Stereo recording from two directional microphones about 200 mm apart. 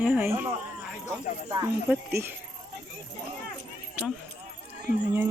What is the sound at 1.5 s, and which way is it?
Speech, 15° right (ahead or behind).